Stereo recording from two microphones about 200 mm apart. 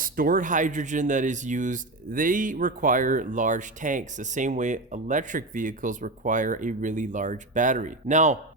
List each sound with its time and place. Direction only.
0.0 s speech: 45° right (ahead or behind)